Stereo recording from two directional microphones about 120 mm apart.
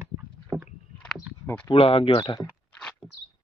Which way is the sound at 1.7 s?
50° left (ahead or behind).